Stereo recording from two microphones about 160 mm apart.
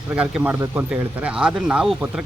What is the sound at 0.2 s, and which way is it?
Speech, 10° right (ahead or behind).